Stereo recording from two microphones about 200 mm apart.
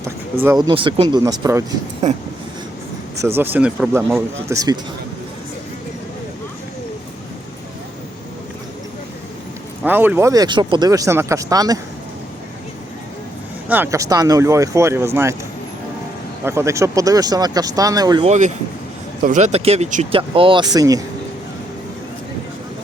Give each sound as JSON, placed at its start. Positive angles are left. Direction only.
{"t": 0.4, "sound": "speech", "side_deg": -20}
{"t": 3.2, "sound": "speech", "side_deg": -10}
{"t": 4.4, "sound": "speech", "side_deg": -15}
{"t": 9.8, "sound": "speech", "side_deg": -10}
{"t": 13.7, "sound": "speech", "side_deg": -10}
{"t": 16.4, "sound": "speech", "side_deg": -15}
{"t": 18.3, "sound": "speech", "side_deg": -35}